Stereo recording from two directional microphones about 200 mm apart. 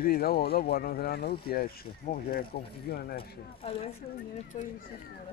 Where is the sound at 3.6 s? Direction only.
30° left (ahead or behind).